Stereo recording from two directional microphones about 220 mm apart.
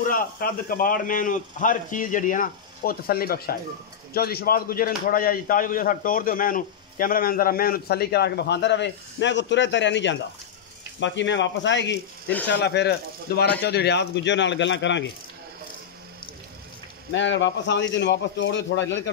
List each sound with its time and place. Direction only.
0.1 s a man's voice: 40° left (ahead or behind)
17.1 s speech: 55° left (ahead or behind)